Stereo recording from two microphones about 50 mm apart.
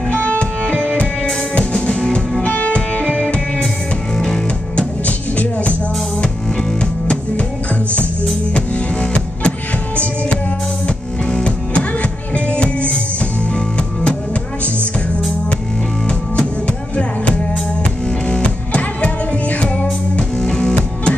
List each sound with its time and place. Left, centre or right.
0.1 s music: left
2.4 s music: left
4.2 s music: centre
5.0 s music: left
8.5 s music: left
11.2 s music: centre
18.2 s music: left